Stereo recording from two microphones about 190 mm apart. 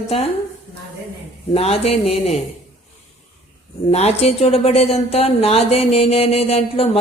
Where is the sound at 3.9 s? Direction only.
35° left (ahead or behind).